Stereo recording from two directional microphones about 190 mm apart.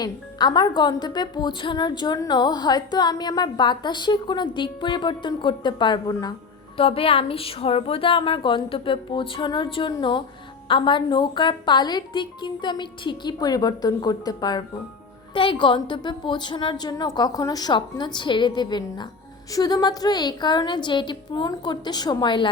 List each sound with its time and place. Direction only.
0.0 s a woman's voice: 20° left (ahead or behind)
6.7 s a woman's voice: 30° left (ahead or behind)